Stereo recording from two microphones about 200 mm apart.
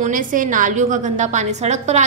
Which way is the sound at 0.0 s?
40° right (ahead or behind).